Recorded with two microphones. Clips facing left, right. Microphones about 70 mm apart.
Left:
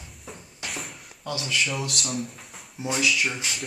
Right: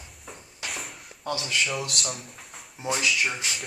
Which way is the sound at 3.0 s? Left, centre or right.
Centre.